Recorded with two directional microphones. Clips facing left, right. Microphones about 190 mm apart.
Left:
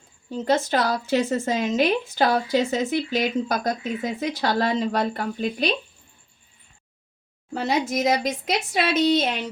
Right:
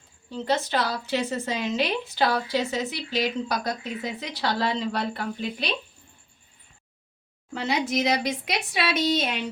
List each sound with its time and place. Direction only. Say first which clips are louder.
0.3 s a woman's voice: left 4 dB; 45° left (ahead or behind)
7.6 s a woman's voice: left 2 dB; 40° left (ahead or behind)